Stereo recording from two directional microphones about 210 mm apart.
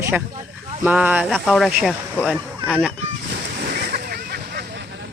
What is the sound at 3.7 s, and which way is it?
Splash, 50° right (ahead or behind).